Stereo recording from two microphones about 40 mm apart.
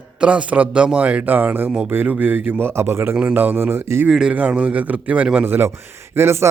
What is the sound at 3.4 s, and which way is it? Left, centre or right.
Speech, right.